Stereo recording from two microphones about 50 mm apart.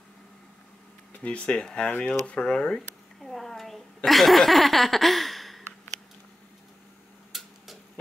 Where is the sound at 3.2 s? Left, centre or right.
Centre.